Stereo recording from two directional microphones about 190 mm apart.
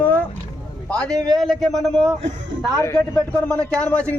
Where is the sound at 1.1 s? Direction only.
20° right (ahead or behind).